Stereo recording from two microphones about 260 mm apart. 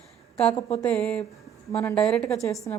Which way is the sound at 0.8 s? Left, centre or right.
Centre.